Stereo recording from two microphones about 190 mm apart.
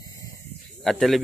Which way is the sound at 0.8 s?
Centre (ahead or behind).